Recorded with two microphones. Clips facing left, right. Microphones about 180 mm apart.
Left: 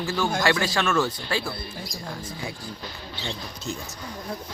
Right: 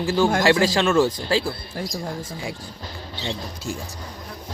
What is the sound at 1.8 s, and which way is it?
Speech, 85° right.